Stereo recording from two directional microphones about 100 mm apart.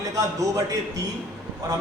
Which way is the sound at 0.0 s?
35° right (ahead or behind).